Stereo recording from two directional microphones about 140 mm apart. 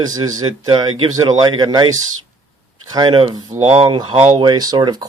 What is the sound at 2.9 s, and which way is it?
Speech, 30° right (ahead or behind).